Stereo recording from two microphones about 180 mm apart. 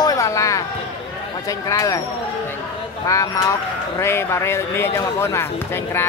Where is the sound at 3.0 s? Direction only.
15° left (ahead or behind).